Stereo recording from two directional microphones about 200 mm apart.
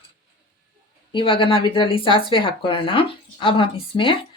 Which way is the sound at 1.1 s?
25° left (ahead or behind).